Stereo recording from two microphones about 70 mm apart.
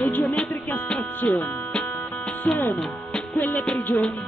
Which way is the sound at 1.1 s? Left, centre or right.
Left.